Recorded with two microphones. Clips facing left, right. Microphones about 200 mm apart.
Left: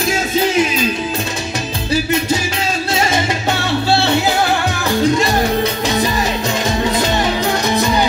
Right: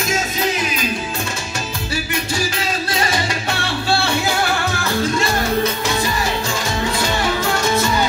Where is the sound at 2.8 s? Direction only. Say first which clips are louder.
Left 5 dB; 25° left (ahead or behind).